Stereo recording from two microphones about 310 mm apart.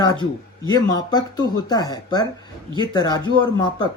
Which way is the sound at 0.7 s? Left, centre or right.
Centre.